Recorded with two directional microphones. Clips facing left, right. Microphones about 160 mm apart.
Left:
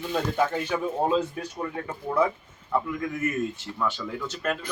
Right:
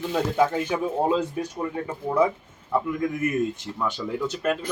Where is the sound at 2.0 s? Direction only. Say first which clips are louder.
Right 3 dB; 10° right (ahead or behind).